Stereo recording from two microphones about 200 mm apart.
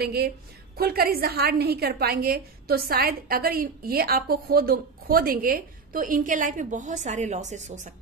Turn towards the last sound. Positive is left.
turn(degrees=-35)  # may be behind; listen again after turning